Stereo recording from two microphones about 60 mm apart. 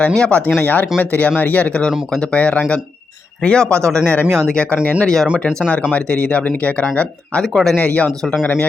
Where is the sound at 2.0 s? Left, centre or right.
Centre.